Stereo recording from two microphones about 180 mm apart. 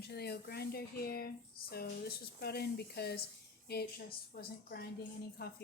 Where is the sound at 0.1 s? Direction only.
65° left (ahead or behind).